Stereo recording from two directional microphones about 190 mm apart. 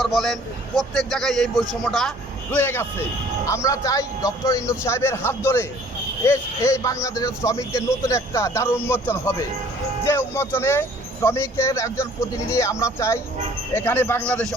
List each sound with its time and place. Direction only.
0.0 s a man's voice: centre (ahead or behind)